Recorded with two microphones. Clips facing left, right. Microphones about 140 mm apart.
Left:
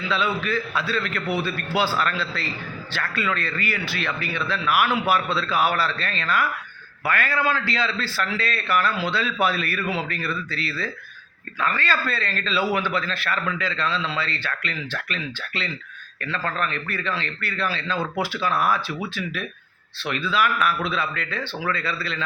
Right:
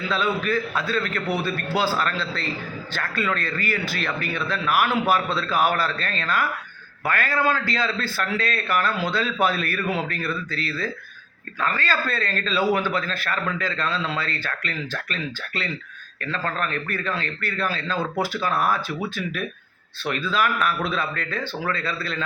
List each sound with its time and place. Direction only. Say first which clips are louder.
0.1 s a man's voice: right 1 dB; 45° right (ahead or behind)
9.8 s speech: right 2 dB; 5° left (ahead or behind)
10.1 s a man's voice: right 1 dB; 45° right (ahead or behind)